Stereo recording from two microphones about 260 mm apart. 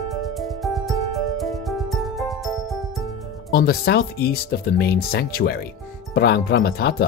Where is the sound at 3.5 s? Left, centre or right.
Left.